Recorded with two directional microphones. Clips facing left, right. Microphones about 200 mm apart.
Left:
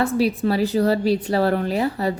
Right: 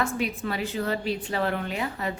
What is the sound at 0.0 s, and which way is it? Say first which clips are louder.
A woman's voice: left 8 dB; 35° left (ahead or behind).